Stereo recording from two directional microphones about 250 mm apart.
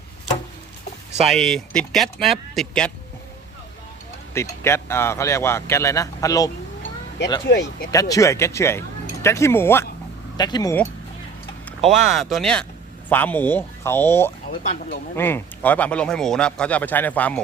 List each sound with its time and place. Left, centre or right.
1.3 s speech: centre
4.4 s speech: centre
7.4 s speech: left
7.9 s speech: centre
11.8 s speech: centre